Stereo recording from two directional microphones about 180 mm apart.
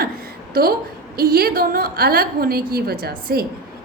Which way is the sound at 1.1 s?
55° right (ahead or behind).